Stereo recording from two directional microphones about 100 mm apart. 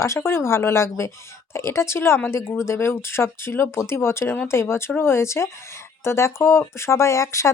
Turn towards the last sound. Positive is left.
turn(degrees=30)  # may be behind; listen again after turning